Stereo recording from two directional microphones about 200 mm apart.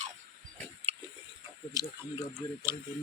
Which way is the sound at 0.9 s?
30° right (ahead or behind).